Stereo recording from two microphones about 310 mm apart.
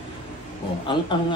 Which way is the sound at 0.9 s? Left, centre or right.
Centre.